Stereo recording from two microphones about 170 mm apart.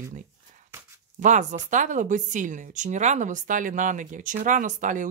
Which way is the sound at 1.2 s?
45° right (ahead or behind).